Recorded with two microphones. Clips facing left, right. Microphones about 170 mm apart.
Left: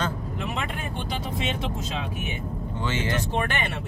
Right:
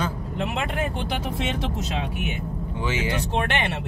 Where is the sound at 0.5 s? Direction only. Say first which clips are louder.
Right 4 dB; 70° right (ahead or behind).